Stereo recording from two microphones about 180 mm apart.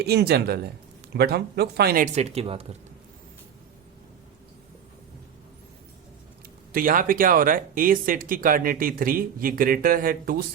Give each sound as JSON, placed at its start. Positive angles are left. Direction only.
{"t": 0.0, "sound": "speech", "side_deg": -60}
{"t": 2.1, "sound": "speech", "side_deg": -35}
{"t": 6.7, "sound": "speech", "side_deg": -50}